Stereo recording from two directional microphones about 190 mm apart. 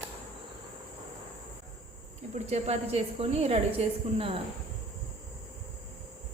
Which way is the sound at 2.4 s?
35° right (ahead or behind).